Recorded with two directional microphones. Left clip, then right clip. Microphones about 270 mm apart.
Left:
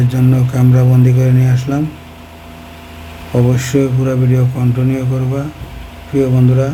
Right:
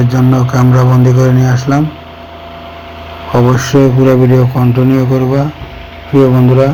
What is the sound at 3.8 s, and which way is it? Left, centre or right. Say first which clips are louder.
A man's voice: right 9 dB; centre.